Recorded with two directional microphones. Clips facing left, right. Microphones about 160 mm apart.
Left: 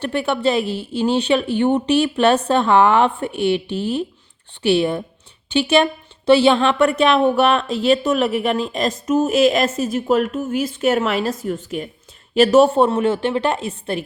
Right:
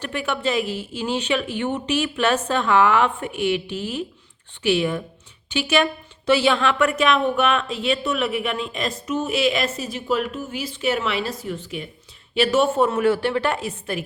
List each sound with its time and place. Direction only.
0.0 s a woman's voice: 30° left (ahead or behind)